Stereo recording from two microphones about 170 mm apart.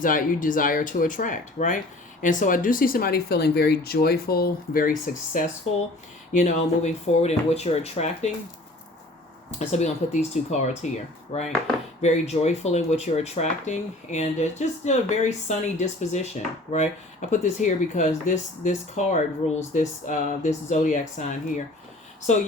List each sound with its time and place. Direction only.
0.0 s speech: 50° left (ahead or behind)
9.6 s speech: 40° left (ahead or behind)